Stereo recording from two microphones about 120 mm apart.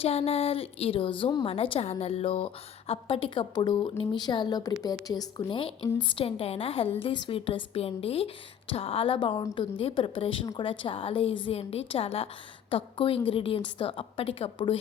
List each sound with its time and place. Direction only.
0.0 s a woman's voice: 55° left (ahead or behind); by 5.3 s 30° left (ahead or behind)
5.5 s a woman's voice: 45° left (ahead or behind)